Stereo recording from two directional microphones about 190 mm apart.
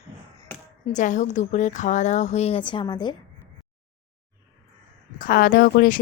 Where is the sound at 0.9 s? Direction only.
40° left (ahead or behind); by 3.1 s 25° left (ahead or behind).